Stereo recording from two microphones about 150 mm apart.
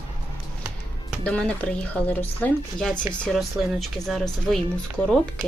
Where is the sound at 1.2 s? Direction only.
5° left (ahead or behind).